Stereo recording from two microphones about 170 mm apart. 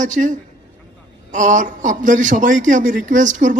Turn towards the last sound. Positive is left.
turn(degrees=-50)  # may be behind; listen again after turning